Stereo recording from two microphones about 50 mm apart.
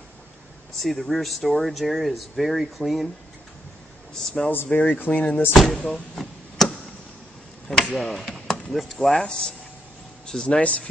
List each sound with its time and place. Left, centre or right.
0.7 s speech: centre
4.1 s speech: centre
4.6 s speech: left
4.9 s speech: left
5.5 s speech: centre
5.9 s chop: centre
7.9 s chop: centre
8.7 s speech: centre
10.2 s speech: centre
10.6 s speech: left